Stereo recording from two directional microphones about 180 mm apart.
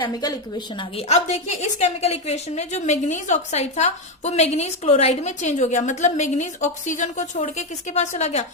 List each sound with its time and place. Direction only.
0.0 s a woman's voice: 20° left (ahead or behind)
0.8 s a woman's voice: 35° left (ahead or behind)